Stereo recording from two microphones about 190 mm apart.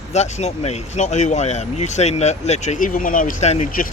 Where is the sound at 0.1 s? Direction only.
35° left (ahead or behind).